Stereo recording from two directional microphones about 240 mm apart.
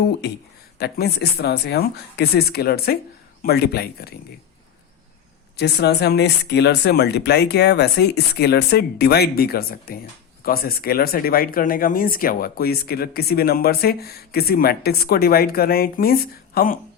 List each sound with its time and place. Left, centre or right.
0.8 s speech: left
5.5 s speech: left